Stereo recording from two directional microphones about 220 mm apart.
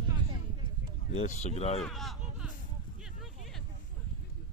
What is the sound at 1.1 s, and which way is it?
Speech, 30° left (ahead or behind).